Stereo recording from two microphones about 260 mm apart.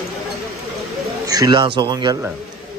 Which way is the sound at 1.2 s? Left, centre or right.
Centre.